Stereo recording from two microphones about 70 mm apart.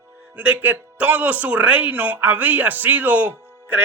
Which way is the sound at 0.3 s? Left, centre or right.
Right.